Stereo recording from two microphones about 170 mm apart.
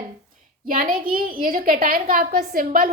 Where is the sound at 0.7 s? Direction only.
55° right (ahead or behind).